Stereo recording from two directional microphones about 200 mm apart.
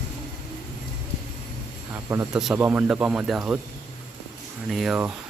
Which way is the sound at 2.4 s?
5° right (ahead or behind).